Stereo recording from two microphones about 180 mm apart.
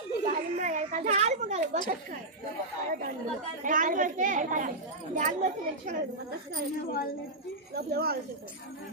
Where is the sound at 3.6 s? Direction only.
45° right (ahead or behind).